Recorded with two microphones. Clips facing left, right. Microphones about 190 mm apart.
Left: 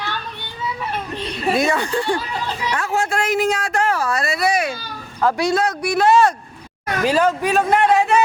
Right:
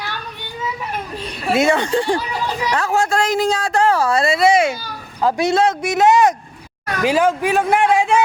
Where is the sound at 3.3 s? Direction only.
35° right (ahead or behind).